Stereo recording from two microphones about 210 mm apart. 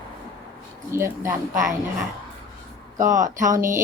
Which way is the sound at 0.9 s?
10° right (ahead or behind).